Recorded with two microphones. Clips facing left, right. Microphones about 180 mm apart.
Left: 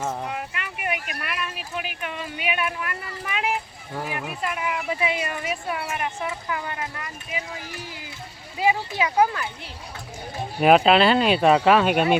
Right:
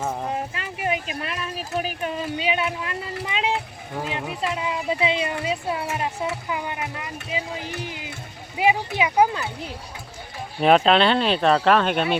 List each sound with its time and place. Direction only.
0.3 s a sound: 30° right (ahead or behind)
1.8 s speech: 35° right (ahead or behind)
3.2 s vehicle: 20° right (ahead or behind)
3.9 s speech: 20° right (ahead or behind)
10.6 s speech: 5° left (ahead or behind)